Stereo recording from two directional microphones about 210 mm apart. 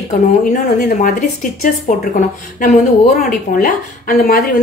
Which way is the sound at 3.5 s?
40° left (ahead or behind).